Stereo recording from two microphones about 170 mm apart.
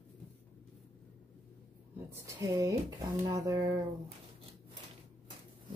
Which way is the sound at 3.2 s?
20° right (ahead or behind).